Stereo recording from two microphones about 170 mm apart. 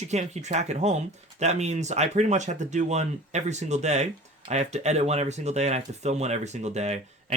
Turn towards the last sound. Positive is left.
turn(degrees=-40)  # may be behind; listen again after turning